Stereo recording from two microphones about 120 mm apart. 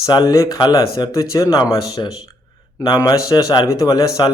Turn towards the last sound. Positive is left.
turn(degrees=35)  # may be behind; listen again after turning